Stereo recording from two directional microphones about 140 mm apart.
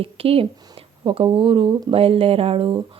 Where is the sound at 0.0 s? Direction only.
45° right (ahead or behind).